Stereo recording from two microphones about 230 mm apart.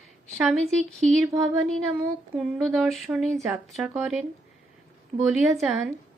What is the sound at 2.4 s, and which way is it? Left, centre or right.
Speech, centre.